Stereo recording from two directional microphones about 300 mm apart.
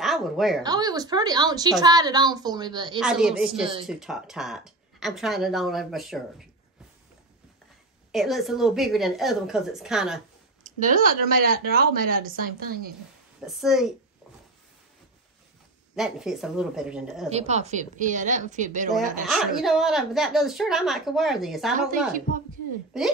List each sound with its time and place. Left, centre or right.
0.0 s a woman's voice: centre
0.7 s a woman's voice: centre
3.0 s a woman's voice: centre
8.1 s a woman's voice: centre
10.6 s speech: right
13.6 s a woman's voice: centre
16.0 s a woman's voice: centre
17.3 s speech: right
19.2 s a woman's voice: centre